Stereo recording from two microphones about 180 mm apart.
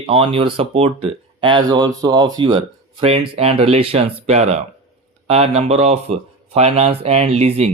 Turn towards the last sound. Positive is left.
turn(degrees=-35)  # may be behind; listen again after turning